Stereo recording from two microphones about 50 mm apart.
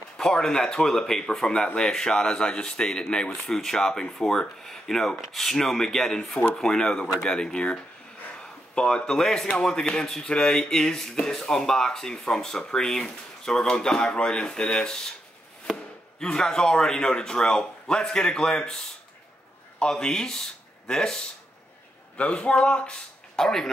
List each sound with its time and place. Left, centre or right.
0.2 s a man's voice: centre
19.8 s speech: centre
22.1 s a man's voice: left